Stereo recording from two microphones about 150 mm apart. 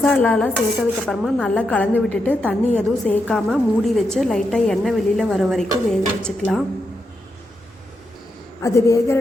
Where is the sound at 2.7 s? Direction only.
5° left (ahead or behind).